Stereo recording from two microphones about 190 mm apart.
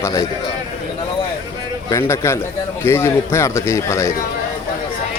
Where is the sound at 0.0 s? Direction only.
15° left (ahead or behind).